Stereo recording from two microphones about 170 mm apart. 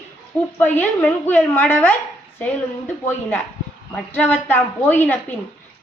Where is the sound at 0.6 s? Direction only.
10° left (ahead or behind).